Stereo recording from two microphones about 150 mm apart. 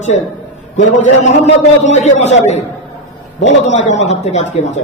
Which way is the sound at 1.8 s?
50° left (ahead or behind).